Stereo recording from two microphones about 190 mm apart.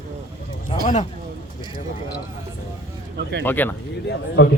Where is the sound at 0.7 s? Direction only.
30° left (ahead or behind).